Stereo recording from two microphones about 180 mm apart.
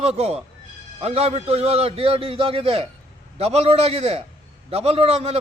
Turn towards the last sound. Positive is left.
turn(degrees=-35)  # may be behind; listen again after turning